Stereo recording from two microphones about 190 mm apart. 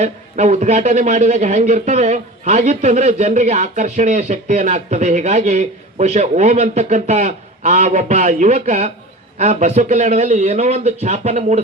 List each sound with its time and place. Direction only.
0.0 s speech: 35° right (ahead or behind)